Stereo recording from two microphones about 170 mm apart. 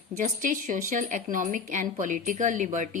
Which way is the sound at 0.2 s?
50° right (ahead or behind).